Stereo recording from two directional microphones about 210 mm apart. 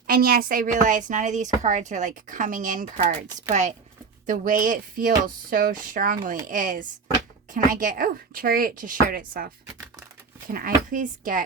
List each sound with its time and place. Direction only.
0.1 s speech: 45° right (ahead or behind)
10.5 s speech: 40° right (ahead or behind)